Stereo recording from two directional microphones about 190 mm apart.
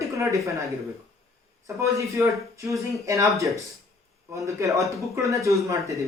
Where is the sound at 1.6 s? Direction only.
15° right (ahead or behind).